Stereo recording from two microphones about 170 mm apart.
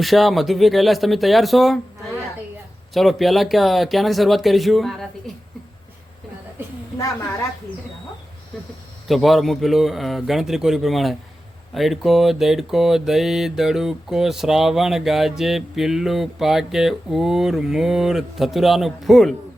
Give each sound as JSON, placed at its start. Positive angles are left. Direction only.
{"t": 0.0, "sound": "mantra", "side_deg": 0}
{"t": 2.9, "sound": "mantra", "side_deg": 0}
{"t": 9.0, "sound": "mantra", "side_deg": 0}